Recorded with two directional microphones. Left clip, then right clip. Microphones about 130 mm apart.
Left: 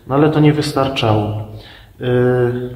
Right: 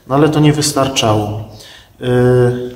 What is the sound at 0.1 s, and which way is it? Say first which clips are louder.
A man's voice: right 1 dB; 35° right (ahead or behind).